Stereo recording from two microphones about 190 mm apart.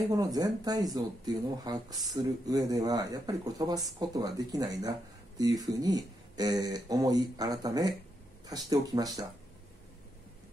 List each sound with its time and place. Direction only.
0.1 s speech: 20° right (ahead or behind)